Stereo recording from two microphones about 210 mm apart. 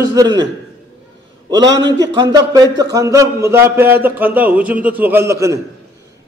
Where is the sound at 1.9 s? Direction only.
20° right (ahead or behind).